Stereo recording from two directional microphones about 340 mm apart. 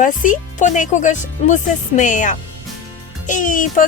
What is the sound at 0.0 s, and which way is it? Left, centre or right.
Music, left.